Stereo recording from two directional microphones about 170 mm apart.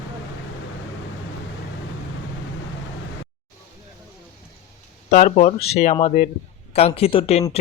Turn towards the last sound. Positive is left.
turn(degrees=35)  # may be behind; listen again after turning